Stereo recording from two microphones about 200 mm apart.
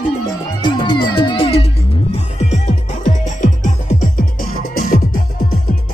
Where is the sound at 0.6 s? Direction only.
20° left (ahead or behind).